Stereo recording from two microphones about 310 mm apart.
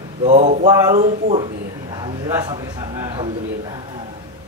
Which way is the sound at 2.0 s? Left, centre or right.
Centre.